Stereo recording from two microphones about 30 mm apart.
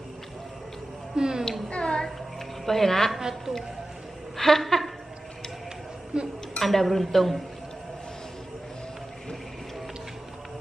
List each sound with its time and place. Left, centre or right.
1.1 s speech: right
1.7 s a sound: left
2.6 s speech: centre
3.2 s a woman's voice: centre
4.4 s a sound: centre
6.1 s speech: right
6.6 s speech: centre